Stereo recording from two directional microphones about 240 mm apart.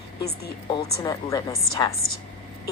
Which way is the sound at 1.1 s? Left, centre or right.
Centre.